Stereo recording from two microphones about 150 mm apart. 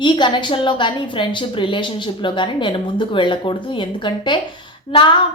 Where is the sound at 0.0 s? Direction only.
30° left (ahead or behind).